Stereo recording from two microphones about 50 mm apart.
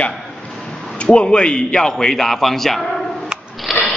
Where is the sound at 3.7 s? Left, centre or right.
Centre.